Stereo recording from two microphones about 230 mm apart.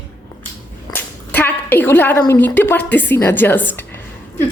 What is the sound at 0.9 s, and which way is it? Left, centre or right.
A woman's voice, centre.